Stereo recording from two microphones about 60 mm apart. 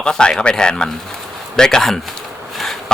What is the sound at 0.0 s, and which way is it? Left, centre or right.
Speech, centre.